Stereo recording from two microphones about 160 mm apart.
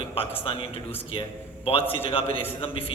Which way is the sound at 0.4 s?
35° left (ahead or behind).